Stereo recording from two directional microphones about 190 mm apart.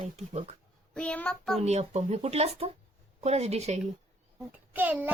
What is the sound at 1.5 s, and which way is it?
Speech, 35° right (ahead or behind).